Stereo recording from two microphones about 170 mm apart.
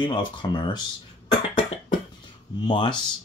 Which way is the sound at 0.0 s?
25° left (ahead or behind).